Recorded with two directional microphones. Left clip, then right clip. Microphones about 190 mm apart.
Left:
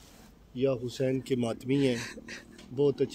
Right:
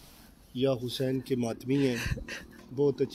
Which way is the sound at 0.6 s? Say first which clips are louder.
Even; 60° right (ahead or behind).